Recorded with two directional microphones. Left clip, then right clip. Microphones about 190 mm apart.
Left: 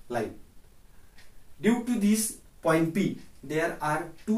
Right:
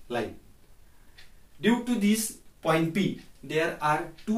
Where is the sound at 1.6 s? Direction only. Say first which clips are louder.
Right 1 dB; 15° right (ahead or behind).